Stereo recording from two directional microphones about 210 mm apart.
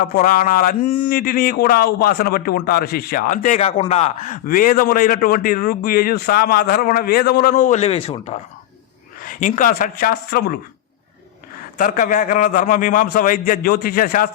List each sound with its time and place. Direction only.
0.0 s speech: 40° left (ahead or behind)
9.2 s speech: 40° left (ahead or behind)
11.8 s a man's voice: 40° left (ahead or behind)